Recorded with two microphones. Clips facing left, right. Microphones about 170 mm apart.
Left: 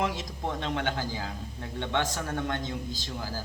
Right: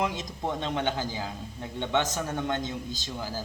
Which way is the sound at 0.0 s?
20° right (ahead or behind).